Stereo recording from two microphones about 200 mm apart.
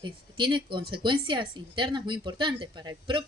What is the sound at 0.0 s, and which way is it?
Speech, 25° right (ahead or behind).